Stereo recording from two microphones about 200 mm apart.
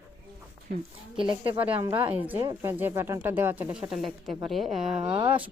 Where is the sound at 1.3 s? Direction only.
25° right (ahead or behind); by 5.0 s centre (ahead or behind).